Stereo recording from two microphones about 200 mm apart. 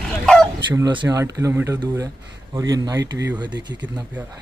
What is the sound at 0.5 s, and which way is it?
Speech, 20° right (ahead or behind).